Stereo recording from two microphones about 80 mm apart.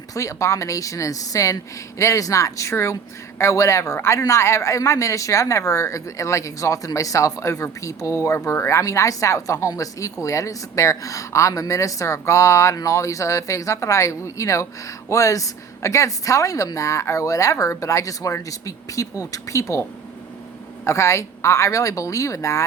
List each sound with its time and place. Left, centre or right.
0.1 s speech: left
20.8 s speech: left